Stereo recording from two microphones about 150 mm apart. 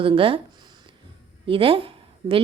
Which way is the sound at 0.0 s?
35° right (ahead or behind).